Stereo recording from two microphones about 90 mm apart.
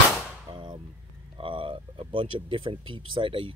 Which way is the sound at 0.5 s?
60° right (ahead or behind).